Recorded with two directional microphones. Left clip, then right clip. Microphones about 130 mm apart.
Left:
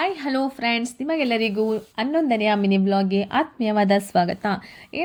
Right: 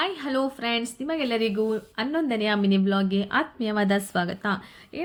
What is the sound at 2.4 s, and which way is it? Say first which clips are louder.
Speech: left 4 dB; 20° left (ahead or behind).